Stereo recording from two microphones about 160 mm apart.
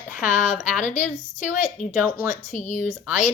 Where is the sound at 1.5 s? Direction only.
50° left (ahead or behind).